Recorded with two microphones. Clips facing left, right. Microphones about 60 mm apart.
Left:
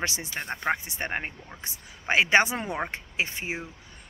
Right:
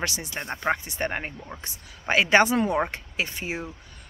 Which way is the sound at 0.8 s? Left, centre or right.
Centre.